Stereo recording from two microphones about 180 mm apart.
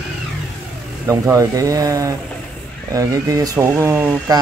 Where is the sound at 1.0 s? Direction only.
15° right (ahead or behind).